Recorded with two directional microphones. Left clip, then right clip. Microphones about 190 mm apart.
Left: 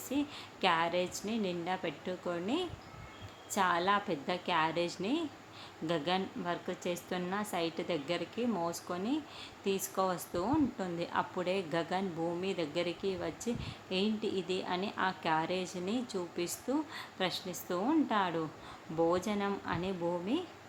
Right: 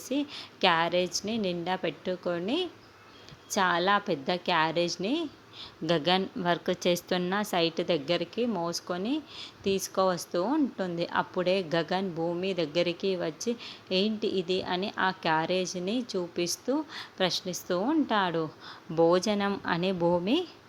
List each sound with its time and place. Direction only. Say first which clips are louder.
0.1 s a woman's voice: right 5 dB; 30° right (ahead or behind)